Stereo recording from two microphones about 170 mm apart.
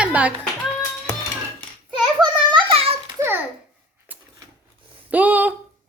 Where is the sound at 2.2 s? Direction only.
30° right (ahead or behind).